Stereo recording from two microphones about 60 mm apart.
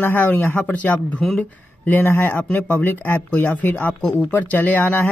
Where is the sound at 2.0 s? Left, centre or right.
Left.